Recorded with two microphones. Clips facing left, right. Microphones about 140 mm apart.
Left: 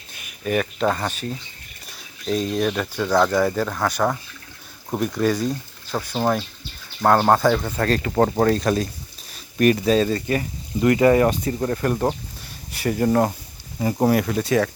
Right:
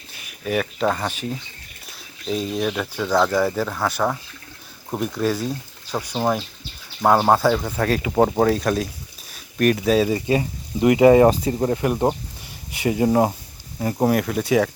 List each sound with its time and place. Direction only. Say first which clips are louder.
0.4 s speech: even; centre (ahead or behind)
2.2 s speech: left 2 dB; 5° right (ahead or behind)
13.7 s speech: left 1 dB; centre (ahead or behind)